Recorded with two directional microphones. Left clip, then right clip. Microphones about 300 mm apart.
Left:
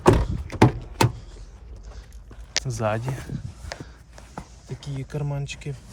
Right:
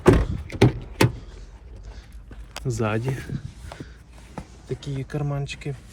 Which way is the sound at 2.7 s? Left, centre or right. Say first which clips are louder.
Right 3 dB; centre.